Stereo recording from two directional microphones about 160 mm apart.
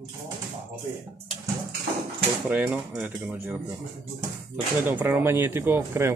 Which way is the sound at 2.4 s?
10° right (ahead or behind).